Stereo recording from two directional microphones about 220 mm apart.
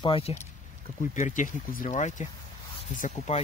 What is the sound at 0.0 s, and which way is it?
Speech, 25° left (ahead or behind).